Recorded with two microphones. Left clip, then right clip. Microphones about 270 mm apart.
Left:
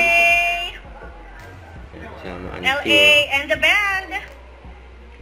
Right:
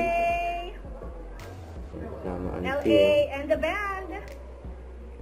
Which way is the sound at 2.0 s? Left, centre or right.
Centre.